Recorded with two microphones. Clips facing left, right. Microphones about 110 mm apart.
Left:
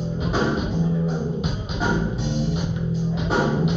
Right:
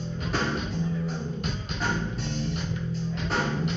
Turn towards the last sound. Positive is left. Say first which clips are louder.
# left 7 dB
turn(degrees=15)  # may be behind; listen again after turning